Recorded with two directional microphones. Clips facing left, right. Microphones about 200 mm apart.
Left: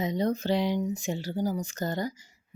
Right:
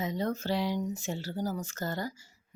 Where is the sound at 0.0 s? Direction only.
20° left (ahead or behind).